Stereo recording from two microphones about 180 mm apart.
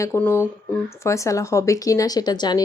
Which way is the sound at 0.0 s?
15° left (ahead or behind).